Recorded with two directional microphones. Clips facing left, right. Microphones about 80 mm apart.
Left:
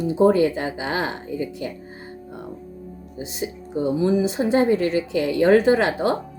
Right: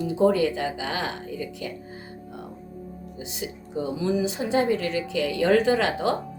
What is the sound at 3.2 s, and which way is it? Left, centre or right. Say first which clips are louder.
Speech: left 6 dB; left.